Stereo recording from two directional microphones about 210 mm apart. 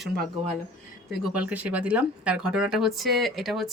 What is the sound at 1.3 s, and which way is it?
Speech, 5° right (ahead or behind).